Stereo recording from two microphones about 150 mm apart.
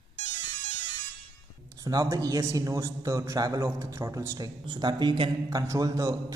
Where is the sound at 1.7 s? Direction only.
25° right (ahead or behind).